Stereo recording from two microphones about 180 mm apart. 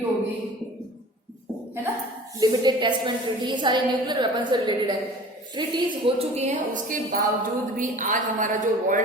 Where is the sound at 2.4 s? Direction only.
20° right (ahead or behind).